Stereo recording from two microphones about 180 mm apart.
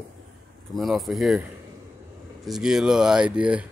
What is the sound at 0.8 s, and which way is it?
Speech, centre (ahead or behind).